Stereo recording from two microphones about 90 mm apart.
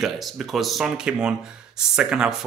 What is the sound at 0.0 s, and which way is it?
Speech, centre (ahead or behind).